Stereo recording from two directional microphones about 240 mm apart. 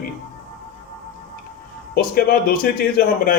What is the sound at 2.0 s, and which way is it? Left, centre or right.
Speech, left.